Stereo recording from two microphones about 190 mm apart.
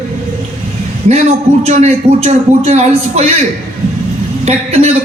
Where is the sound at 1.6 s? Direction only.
35° right (ahead or behind).